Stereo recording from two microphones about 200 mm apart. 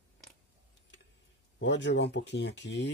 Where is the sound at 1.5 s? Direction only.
65° left (ahead or behind).